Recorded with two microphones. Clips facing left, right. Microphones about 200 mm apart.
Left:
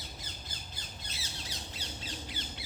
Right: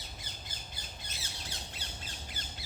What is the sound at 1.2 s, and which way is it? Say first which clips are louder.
Squawk: left 1 dB; 50° right (ahead or behind).